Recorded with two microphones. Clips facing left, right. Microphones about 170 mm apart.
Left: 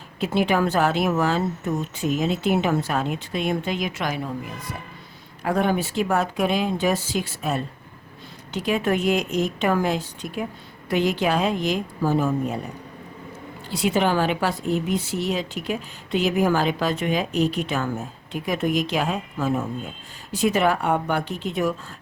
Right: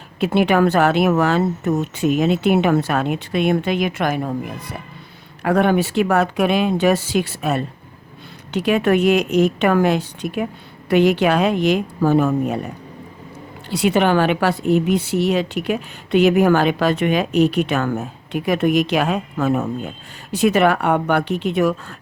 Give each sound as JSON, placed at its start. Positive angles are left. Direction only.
{"t": 0.2, "sound": "speech", "side_deg": -65}
{"t": 5.4, "sound": "a woman's voice", "side_deg": -70}
{"t": 13.7, "sound": "a woman's voice", "side_deg": -65}